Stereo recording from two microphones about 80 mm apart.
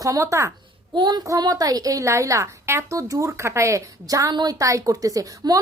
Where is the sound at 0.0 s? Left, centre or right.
Right.